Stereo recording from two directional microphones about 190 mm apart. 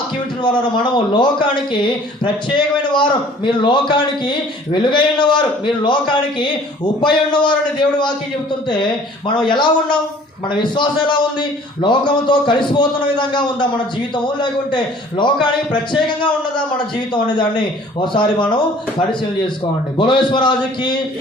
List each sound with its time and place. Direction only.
0.8 s speech: 25° left (ahead or behind)
18.0 s speech: 25° left (ahead or behind)